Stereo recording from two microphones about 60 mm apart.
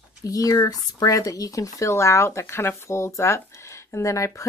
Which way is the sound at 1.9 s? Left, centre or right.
Left.